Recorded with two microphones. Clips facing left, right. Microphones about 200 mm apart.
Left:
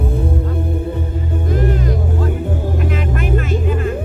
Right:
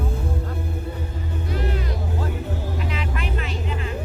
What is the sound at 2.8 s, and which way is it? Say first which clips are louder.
Music: left 8 dB; 50° left (ahead or behind).